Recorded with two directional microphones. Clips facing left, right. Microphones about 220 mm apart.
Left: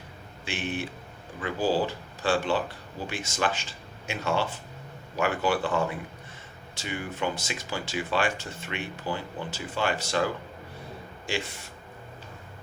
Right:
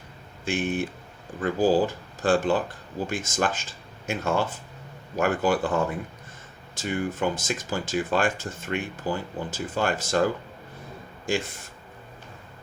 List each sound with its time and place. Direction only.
0.4 s speech: 50° right (ahead or behind)
6.7 s speech: 45° right (ahead or behind)